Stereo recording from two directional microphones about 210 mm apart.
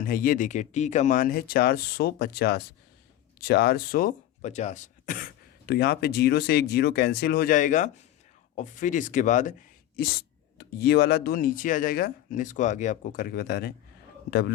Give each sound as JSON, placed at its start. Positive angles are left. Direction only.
{"t": 0.0, "sound": "speech", "side_deg": 40}